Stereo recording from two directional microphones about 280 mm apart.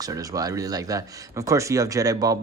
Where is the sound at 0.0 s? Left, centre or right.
Centre.